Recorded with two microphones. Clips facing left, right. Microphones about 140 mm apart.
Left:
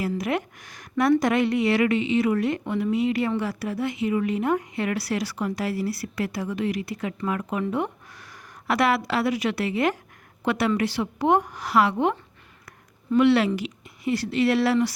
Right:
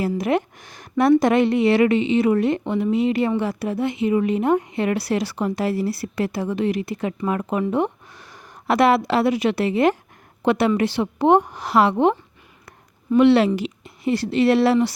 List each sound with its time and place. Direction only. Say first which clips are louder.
0.0 s a woman's voice: right 5 dB; 25° right (ahead or behind)
13.1 s speech: right 4 dB; 25° right (ahead or behind)